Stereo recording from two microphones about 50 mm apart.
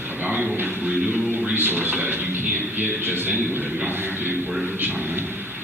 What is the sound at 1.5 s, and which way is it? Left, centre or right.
A man's voice, right.